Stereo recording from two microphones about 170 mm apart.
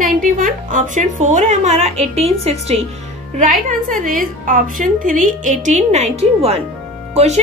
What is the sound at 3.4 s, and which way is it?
A woman's voice, 55° right (ahead or behind).